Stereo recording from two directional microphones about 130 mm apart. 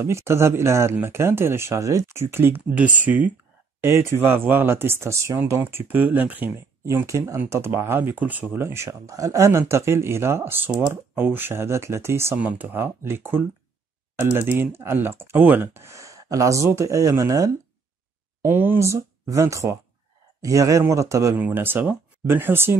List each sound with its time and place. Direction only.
0.0 s speech: 20° right (ahead or behind)